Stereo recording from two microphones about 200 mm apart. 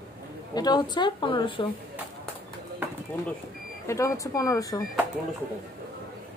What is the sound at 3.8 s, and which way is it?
A woman's voice, 15° left (ahead or behind).